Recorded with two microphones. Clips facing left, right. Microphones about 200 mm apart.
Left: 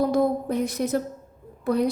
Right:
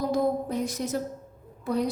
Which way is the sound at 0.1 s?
60° left (ahead or behind).